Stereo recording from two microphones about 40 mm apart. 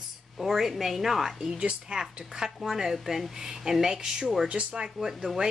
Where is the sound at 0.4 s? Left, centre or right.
Centre.